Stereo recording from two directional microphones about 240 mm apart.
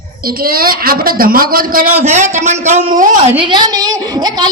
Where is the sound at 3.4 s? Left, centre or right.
Centre.